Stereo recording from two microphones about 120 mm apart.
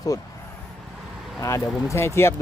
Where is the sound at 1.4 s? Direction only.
25° left (ahead or behind).